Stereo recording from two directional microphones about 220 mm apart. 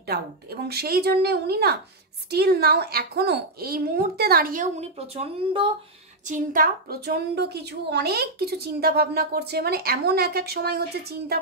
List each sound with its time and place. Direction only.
0.0 s a woman's voice: 45° right (ahead or behind); by 5.7 s 25° right (ahead or behind)
6.2 s a woman's voice: 35° right (ahead or behind)